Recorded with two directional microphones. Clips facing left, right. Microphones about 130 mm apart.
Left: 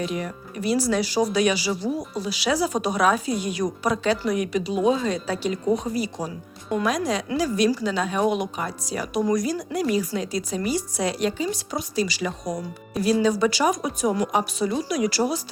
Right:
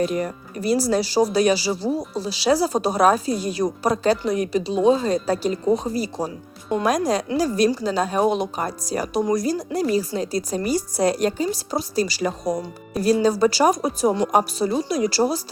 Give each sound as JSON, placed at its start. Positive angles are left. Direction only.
{"t": 0.0, "sound": "speech", "side_deg": -45}
{"t": 6.8, "sound": "speech", "side_deg": -40}